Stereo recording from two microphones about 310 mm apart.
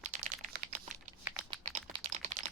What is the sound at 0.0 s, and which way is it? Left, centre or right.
Crumpling, right.